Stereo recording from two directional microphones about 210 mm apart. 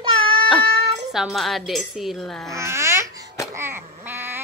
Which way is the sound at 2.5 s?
15° right (ahead or behind).